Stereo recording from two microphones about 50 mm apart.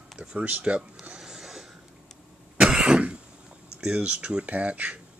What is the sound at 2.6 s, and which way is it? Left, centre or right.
Cough, centre.